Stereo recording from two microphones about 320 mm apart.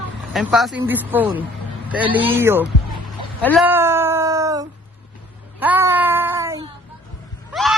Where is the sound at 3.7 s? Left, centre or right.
Centre.